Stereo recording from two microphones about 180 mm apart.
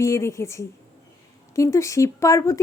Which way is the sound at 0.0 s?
15° left (ahead or behind).